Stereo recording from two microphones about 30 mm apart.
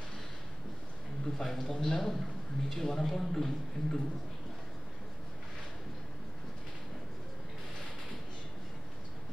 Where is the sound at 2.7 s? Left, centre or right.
Centre.